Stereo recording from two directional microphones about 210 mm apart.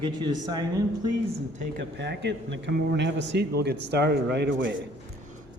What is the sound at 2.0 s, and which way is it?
A man's voice, 55° right (ahead or behind).